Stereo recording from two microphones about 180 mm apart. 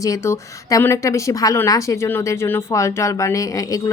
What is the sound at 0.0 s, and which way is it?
A woman's voice, 15° left (ahead or behind).